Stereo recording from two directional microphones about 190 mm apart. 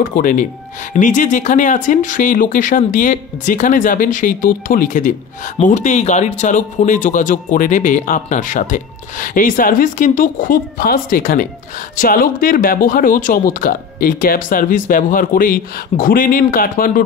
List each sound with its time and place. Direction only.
0.0 s speech: 45° left (ahead or behind)